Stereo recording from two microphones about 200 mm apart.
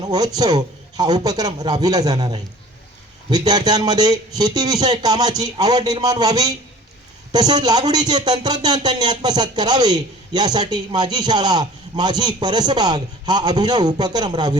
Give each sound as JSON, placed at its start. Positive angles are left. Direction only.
{"t": 0.0, "sound": "speech", "side_deg": -20}